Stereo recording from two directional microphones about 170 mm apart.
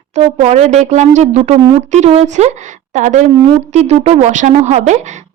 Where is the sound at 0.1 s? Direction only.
40° right (ahead or behind).